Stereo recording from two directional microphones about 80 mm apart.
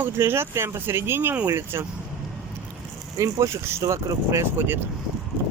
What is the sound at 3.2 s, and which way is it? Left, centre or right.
Speech, right.